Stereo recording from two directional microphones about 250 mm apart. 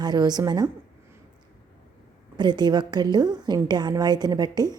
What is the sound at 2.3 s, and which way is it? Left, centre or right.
A woman's voice, centre.